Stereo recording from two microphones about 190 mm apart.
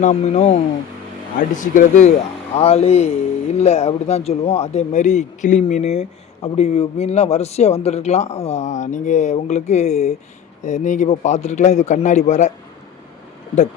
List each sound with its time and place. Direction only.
0.0 s speech: 35° left (ahead or behind)
1.6 s speech: 40° left (ahead or behind)